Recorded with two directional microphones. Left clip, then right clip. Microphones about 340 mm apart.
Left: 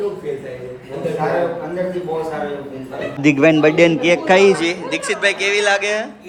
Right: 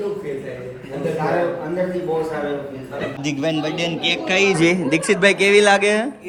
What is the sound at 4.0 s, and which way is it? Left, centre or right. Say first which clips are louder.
Speech: left 6 dB; centre.